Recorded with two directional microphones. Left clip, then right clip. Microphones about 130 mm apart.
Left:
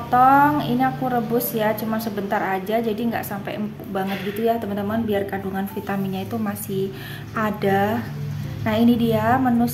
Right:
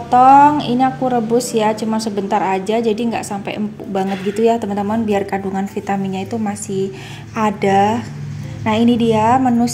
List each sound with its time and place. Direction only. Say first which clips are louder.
0.1 s a woman's voice: right 7 dB; 35° right (ahead or behind)
6.1 s a woman's voice: right 5 dB; 25° right (ahead or behind)